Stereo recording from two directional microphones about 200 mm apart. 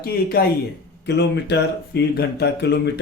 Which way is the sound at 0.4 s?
50° left (ahead or behind).